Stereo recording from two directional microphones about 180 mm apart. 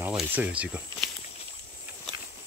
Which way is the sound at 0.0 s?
10° right (ahead or behind).